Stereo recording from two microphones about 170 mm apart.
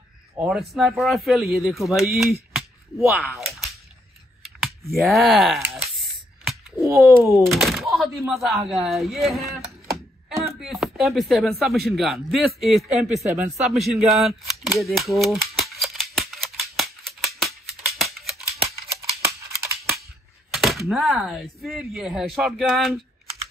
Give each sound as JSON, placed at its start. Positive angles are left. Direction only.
{"t": 0.4, "sound": "a man's voice", "side_deg": 0}
{"t": 4.4, "sound": "clicking", "side_deg": 0}
{"t": 4.9, "sound": "a sound", "side_deg": 0}
{"t": 6.8, "sound": "a sound", "side_deg": -15}
{"t": 7.3, "sound": "a man's voice", "side_deg": 0}
{"t": 9.8, "sound": "a sound", "side_deg": -20}
{"t": 10.6, "sound": "a man's voice", "side_deg": 0}
{"t": 14.8, "sound": "rattle", "side_deg": 0}
{"t": 19.2, "sound": "scissors", "side_deg": -15}
{"t": 20.5, "sound": "a man's voice", "side_deg": 0}